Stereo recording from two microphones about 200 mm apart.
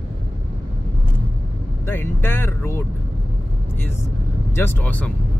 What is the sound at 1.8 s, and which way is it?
Speech, 10° left (ahead or behind).